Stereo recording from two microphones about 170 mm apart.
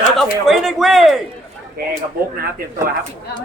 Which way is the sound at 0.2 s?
Centre (ahead or behind).